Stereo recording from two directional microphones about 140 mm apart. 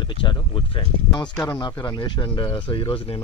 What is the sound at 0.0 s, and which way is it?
Speech, 35° left (ahead or behind).